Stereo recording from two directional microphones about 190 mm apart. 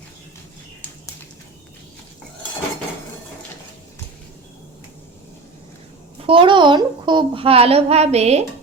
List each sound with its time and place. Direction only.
6.2 s a woman's voice: 25° right (ahead or behind)